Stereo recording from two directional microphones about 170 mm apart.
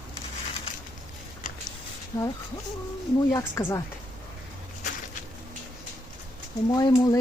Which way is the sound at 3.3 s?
15° left (ahead or behind).